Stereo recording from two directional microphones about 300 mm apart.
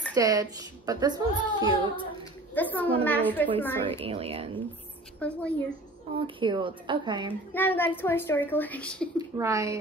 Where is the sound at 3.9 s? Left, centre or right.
Centre.